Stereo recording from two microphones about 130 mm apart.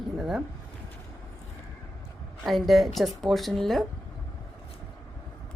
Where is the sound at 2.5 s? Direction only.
Centre (ahead or behind).